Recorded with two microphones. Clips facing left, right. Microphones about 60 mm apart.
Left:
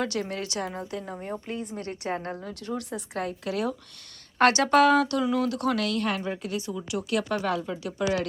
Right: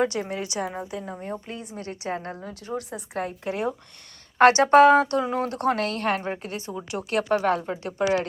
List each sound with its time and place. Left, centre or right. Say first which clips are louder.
0.0 s a woman's voice: right 4 dB; centre
2.4 s a woman's voice: right 1 dB; centre
3.4 s speech: right 1 dB; right